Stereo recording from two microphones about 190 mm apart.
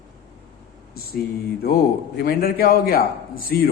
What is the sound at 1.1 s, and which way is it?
A woman's voice, 50° left (ahead or behind).